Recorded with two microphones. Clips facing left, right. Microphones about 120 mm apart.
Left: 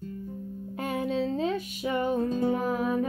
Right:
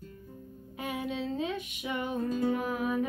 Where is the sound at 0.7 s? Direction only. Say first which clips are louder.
Left 6 dB; 45° left (ahead or behind).